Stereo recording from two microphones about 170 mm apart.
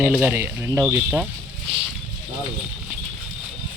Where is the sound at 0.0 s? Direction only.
10° right (ahead or behind).